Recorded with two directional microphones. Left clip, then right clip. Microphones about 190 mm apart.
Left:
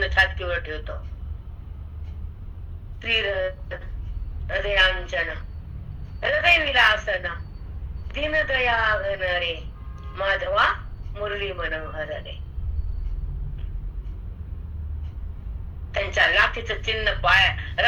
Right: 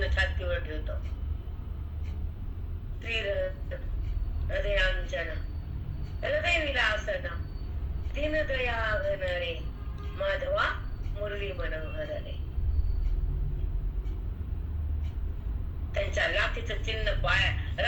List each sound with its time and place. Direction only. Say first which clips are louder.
0.0 s a sound: left 10 dB; 40° left (ahead or behind)
3.0 s a man's voice: left 7 dB; 40° left (ahead or behind)
15.9 s a woman's voice: left 8 dB; 40° left (ahead or behind)